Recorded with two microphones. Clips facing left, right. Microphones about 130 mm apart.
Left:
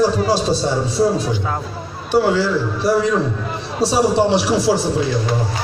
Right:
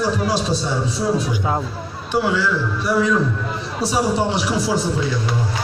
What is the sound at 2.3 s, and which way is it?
Speech, 35° left (ahead or behind).